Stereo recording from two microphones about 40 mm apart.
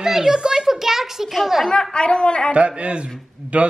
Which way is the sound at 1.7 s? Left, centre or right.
Centre.